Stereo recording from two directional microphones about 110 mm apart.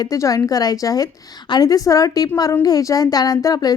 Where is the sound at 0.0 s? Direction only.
30° left (ahead or behind).